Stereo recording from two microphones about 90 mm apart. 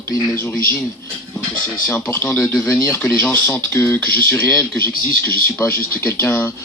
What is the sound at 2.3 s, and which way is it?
Speech, 30° left (ahead or behind).